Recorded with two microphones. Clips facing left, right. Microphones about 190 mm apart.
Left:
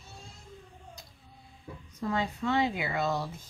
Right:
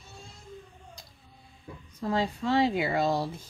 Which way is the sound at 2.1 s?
30° right (ahead or behind).